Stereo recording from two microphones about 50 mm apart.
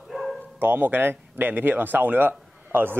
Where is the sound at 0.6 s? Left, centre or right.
Right.